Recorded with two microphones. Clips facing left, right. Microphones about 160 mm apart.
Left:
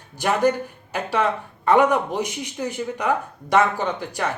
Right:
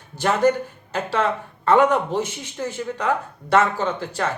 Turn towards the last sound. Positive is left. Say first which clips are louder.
# right 1 dB
turn(degrees=15)  # may be behind; listen again after turning